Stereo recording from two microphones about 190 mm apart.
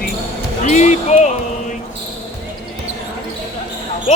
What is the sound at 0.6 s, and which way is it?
Speech, 40° left (ahead or behind).